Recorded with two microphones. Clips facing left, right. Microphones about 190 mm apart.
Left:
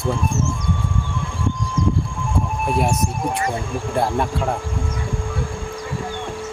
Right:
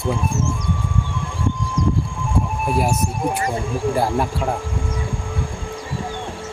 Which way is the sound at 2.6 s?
Centre (ahead or behind).